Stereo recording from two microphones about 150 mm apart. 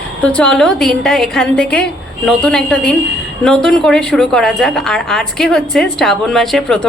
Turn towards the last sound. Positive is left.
turn(degrees=5)  # may be behind; listen again after turning